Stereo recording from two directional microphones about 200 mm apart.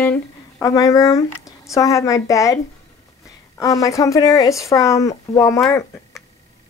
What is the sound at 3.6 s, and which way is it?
Speech, 15° left (ahead or behind).